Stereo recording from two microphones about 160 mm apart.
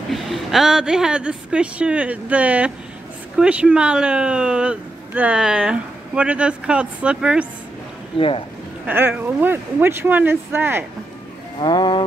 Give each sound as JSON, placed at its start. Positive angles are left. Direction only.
{"t": 0.1, "sound": "speech", "side_deg": 0}
{"t": 8.2, "sound": "speech", "side_deg": 35}
{"t": 8.8, "sound": "speech", "side_deg": -10}
{"t": 11.6, "sound": "speech", "side_deg": 30}